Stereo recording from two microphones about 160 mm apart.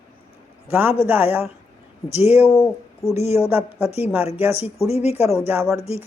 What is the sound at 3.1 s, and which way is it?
Speech, 40° left (ahead or behind).